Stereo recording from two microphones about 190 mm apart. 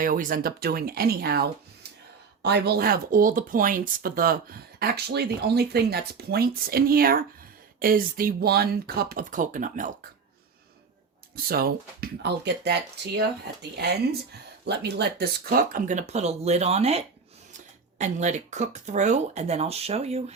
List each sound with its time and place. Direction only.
0.0 s speech: 45° right (ahead or behind)
11.4 s speech: 50° right (ahead or behind); by 20.3 s 35° right (ahead or behind)